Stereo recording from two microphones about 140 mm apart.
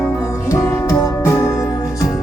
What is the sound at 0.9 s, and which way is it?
Music, 20° left (ahead or behind).